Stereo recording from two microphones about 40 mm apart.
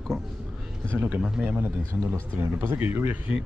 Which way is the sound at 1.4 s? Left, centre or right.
Right.